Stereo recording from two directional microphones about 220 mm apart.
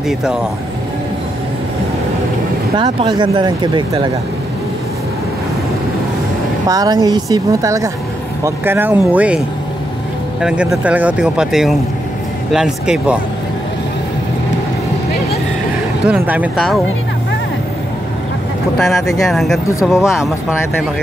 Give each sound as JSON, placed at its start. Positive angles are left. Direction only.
{"t": 2.8, "sound": "speech", "side_deg": -20}
{"t": 6.7, "sound": "a woman's voice", "side_deg": -15}
{"t": 10.4, "sound": "speech", "side_deg": -5}
{"t": 16.1, "sound": "speech", "side_deg": -5}
{"t": 18.8, "sound": "speech", "side_deg": 0}